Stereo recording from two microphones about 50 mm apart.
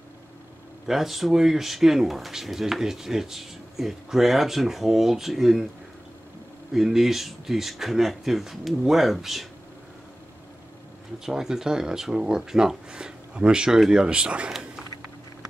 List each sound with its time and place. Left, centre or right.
0.8 s speech: centre
6.7 s speech: centre
11.2 s speech: centre